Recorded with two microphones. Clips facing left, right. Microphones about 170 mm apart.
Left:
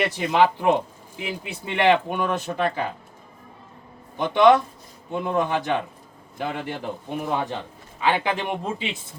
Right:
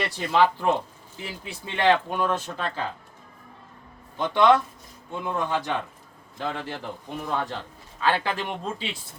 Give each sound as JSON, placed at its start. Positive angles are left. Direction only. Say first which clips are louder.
{"t": 0.0, "sound": "speech", "louder": "left 2 dB", "side_deg": 15}
{"t": 4.2, "sound": "speech", "louder": "left 3 dB", "side_deg": 15}